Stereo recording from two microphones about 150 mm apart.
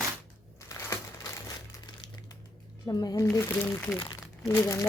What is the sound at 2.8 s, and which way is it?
Speech, 25° left (ahead or behind).